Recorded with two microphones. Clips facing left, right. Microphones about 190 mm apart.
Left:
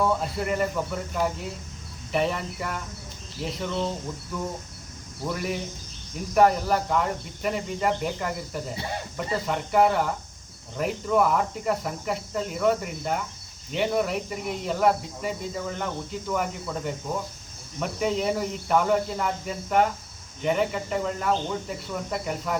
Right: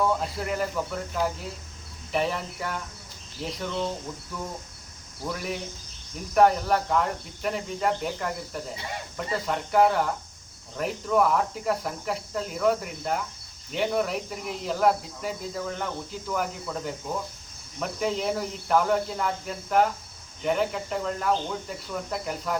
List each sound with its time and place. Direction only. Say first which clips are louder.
0.0 s speech: left 1 dB; centre (ahead or behind)
5.2 s speech: left 2 dB; centre (ahead or behind)